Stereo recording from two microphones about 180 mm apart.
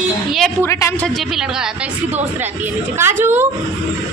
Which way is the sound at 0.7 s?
15° left (ahead or behind).